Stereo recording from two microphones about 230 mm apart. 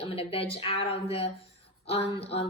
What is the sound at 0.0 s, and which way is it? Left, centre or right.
A woman's voice, left.